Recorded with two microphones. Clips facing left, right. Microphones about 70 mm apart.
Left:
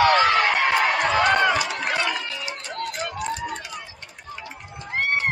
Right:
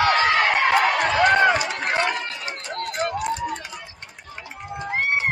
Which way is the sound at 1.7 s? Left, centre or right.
Right.